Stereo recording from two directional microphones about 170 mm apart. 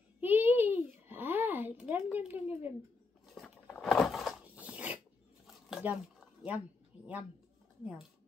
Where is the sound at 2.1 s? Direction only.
10° right (ahead or behind).